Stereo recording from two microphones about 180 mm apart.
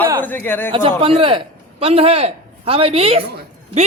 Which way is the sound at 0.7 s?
30° right (ahead or behind).